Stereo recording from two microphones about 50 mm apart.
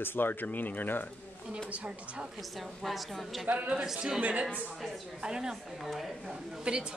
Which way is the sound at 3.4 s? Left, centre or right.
Right.